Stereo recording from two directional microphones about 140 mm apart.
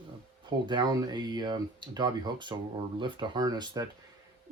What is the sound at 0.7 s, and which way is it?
Speech, 30° right (ahead or behind).